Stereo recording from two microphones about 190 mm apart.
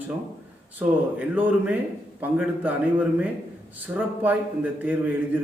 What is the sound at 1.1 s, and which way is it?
Speech, 10° right (ahead or behind).